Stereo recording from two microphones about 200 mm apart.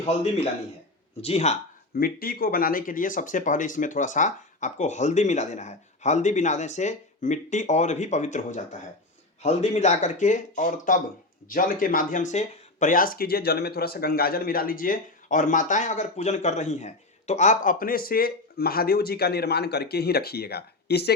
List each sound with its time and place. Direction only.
0.0 s speech: 30° left (ahead or behind)
2.0 s speech: 50° left (ahead or behind)